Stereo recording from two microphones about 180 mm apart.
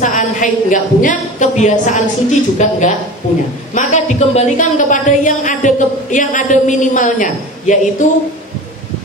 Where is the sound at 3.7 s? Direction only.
40° left (ahead or behind).